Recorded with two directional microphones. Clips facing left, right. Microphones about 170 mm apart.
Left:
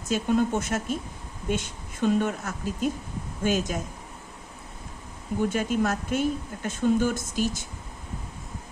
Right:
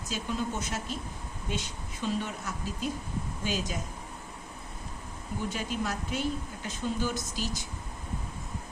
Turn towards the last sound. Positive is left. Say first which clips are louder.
# left 7 dB
turn(degrees=50)  # may be behind; listen again after turning